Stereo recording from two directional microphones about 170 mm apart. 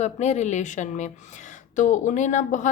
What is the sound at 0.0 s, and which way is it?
Speech, 40° left (ahead or behind).